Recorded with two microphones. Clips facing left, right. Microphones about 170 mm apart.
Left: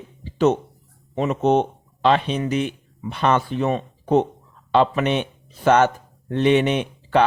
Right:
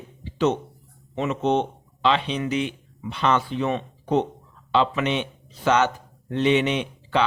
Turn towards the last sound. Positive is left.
turn(degrees=50)  # may be behind; listen again after turning